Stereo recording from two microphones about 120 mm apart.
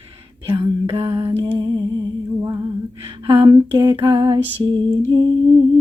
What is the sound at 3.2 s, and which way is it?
Female singing, 45° right (ahead or behind).